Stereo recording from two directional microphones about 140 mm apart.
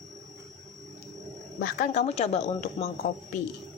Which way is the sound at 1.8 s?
50° left (ahead or behind).